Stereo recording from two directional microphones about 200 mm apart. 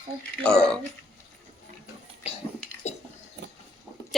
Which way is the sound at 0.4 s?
5° left (ahead or behind).